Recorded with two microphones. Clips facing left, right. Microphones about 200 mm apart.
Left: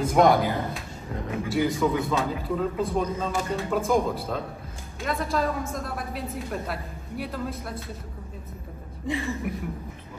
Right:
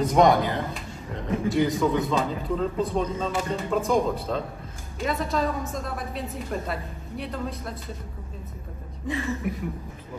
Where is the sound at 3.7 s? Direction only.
Centre (ahead or behind).